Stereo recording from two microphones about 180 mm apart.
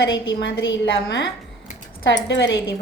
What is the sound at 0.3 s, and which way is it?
A woman's voice, 90° left.